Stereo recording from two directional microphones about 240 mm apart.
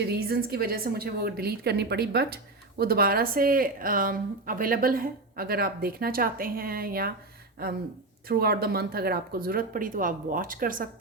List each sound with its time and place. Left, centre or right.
0.1 s a woman's voice: right
8.3 s a woman's voice: right